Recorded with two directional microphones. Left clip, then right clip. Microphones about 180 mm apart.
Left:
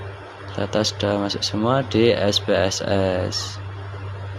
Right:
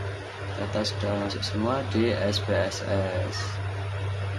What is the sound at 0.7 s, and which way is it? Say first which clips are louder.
Speech: left 8 dB; 40° left (ahead or behind).